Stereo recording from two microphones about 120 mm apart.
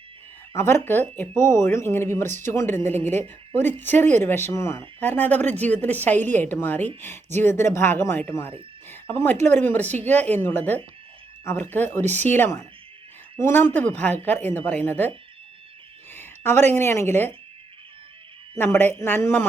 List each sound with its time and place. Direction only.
0.5 s a woman's voice: 20° left (ahead or behind)
16.1 s a woman's voice: 20° left (ahead or behind)
18.5 s a woman's voice: 15° left (ahead or behind)